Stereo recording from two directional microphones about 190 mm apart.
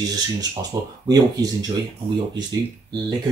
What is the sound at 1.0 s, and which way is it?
Speech, 20° right (ahead or behind).